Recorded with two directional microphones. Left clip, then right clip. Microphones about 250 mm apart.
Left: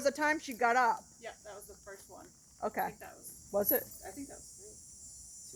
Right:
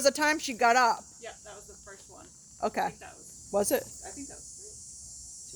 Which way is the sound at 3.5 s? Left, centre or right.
Right.